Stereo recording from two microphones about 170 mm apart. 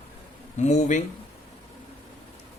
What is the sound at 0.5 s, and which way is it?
Speech, 45° left (ahead or behind).